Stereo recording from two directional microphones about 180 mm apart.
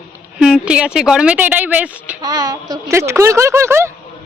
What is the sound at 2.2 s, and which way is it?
A woman's voice, 20° right (ahead or behind).